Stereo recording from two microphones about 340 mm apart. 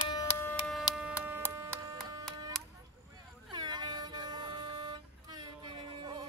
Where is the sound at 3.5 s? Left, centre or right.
Centre.